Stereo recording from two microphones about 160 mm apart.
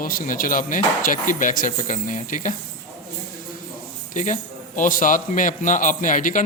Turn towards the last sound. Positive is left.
turn(degrees=55)  # may be behind; listen again after turning